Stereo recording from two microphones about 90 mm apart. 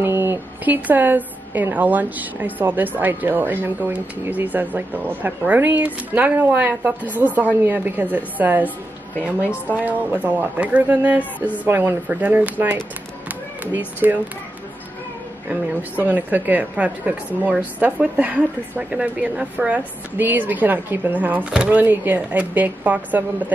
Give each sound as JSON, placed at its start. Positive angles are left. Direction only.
{"t": 0.0, "sound": "a woman's voice", "side_deg": -25}
{"t": 9.8, "sound": "a woman's voice", "side_deg": -20}
{"t": 15.7, "sound": "a woman's voice", "side_deg": -20}